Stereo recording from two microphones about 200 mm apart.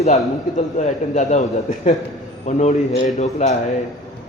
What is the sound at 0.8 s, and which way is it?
A man's voice, 35° left (ahead or behind).